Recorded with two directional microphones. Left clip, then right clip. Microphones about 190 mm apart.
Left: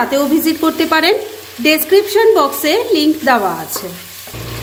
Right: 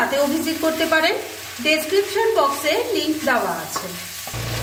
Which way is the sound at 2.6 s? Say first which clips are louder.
Left 7 dB; 60° left (ahead or behind).